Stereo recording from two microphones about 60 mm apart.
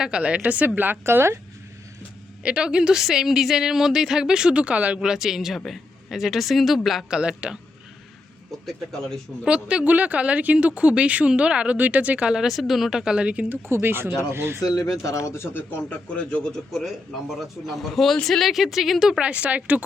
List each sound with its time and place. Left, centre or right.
0.0 s speech: centre
1.0 s speech: right
2.4 s a woman's voice: centre
5.0 s speech: centre
7.1 s a woman's voice: centre
8.6 s speech: centre
9.5 s speech: centre
13.7 s speech: right
14.6 s speech: left
15.9 s speech: left
16.4 s speech: centre
19.2 s speech: right